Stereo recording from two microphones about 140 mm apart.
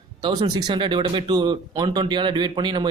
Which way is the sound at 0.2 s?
30° right (ahead or behind).